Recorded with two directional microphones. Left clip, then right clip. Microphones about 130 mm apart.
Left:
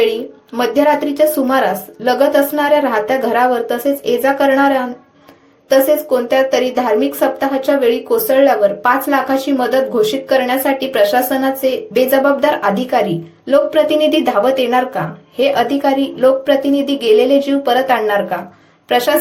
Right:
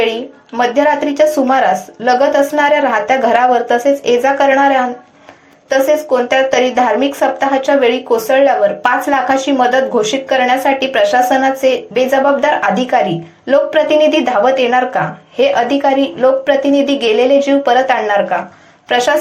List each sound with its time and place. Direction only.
0.5 s speech: 30° left (ahead or behind)